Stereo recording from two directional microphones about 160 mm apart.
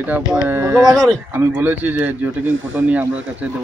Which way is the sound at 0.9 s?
Centre (ahead or behind).